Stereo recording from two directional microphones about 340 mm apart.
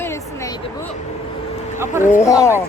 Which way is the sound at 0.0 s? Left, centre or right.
Centre.